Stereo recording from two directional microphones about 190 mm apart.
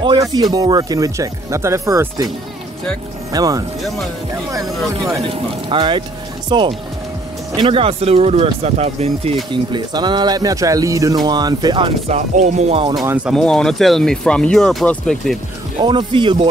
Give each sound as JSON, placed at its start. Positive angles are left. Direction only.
{"t": 0.0, "sound": "speech", "side_deg": -25}
{"t": 3.3, "sound": "speech", "side_deg": -20}
{"t": 12.4, "sound": "speech", "side_deg": -40}
{"t": 13.0, "sound": "speech", "side_deg": -10}
{"t": 13.3, "sound": "speech", "side_deg": 5}
{"t": 15.8, "sound": "speech", "side_deg": -25}